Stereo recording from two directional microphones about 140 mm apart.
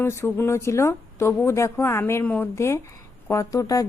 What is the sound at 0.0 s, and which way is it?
A woman's voice, 15° left (ahead or behind).